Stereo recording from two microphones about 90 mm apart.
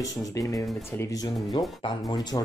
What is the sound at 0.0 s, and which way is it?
Speech, 40° left (ahead or behind).